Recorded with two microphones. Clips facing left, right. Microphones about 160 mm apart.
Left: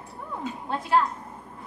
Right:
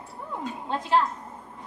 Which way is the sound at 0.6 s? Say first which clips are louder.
Even; 20° right (ahead or behind).